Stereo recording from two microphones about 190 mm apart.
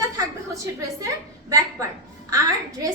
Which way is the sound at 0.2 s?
15° right (ahead or behind).